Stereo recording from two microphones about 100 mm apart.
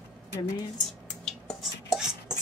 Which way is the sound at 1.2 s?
5° left (ahead or behind).